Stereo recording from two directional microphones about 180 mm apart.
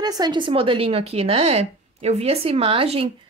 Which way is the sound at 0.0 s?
25° right (ahead or behind).